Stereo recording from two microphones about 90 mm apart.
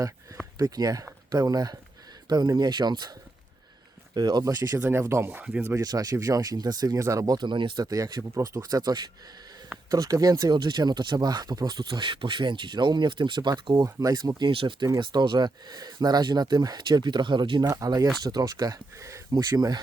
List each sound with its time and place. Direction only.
0.6 s speech: 45° right (ahead or behind)
4.1 s speech: 50° right (ahead or behind)
4.8 s speech: 30° right (ahead or behind)
5.7 s speech: 45° right (ahead or behind)
7.4 s speech: 60° right (ahead or behind)
7.9 s speech: 40° right (ahead or behind)
8.8 s speech: 50° right (ahead or behind)
10.6 s speech: 55° right (ahead or behind)
13.8 s speech: 40° right (ahead or behind)
14.5 s speech: 75° right (ahead or behind)
14.9 s speech: 55° right (ahead or behind)
17.7 s speech: 40° right (ahead or behind)